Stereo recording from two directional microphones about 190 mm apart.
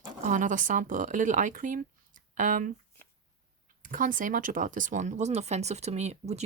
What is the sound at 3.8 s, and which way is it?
Speech, 45° right (ahead or behind).